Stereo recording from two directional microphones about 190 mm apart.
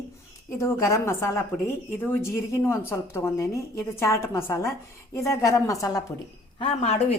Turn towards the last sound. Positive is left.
turn(degrees=35)  # may be behind; listen again after turning